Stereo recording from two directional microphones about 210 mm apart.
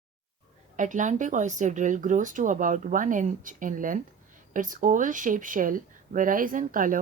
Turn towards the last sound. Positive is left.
turn(degrees=-40)  # may be behind; listen again after turning